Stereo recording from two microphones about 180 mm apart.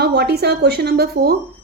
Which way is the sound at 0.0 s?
60° right (ahead or behind).